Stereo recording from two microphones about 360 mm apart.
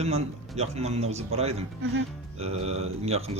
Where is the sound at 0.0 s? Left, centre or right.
Centre.